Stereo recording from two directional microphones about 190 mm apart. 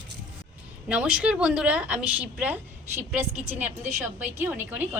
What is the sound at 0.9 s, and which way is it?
A woman's voice, 5° right (ahead or behind).